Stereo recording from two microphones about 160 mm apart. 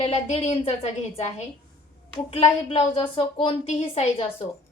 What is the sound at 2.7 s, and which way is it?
A woman's voice, 35° left (ahead or behind).